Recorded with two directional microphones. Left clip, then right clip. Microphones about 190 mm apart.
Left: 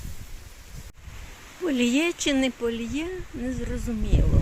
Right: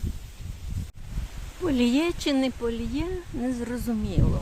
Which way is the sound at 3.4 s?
10° right (ahead or behind).